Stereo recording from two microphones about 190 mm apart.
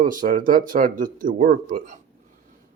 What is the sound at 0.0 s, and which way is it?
Speech, 45° right (ahead or behind).